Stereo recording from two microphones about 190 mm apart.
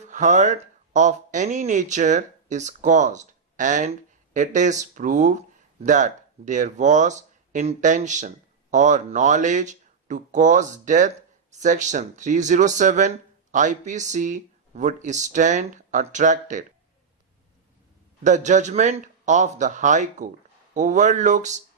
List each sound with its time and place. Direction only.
0.0 s speech: 40° right (ahead or behind)
18.2 s speech: 40° right (ahead or behind)